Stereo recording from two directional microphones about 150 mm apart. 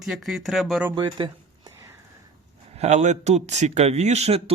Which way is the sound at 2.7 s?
50° right (ahead or behind).